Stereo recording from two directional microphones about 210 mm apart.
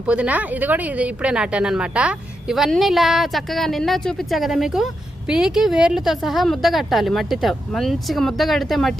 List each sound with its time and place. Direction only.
0.0 s a woman's voice: 5° right (ahead or behind)